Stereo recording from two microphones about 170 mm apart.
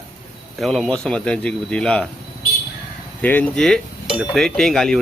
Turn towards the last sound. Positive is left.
turn(degrees=0)  # may be behind; listen again after turning